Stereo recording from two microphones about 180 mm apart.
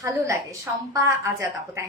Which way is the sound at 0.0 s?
15° right (ahead or behind).